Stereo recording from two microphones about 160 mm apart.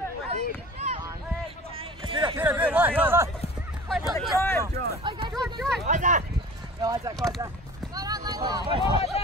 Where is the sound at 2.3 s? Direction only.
10° right (ahead or behind).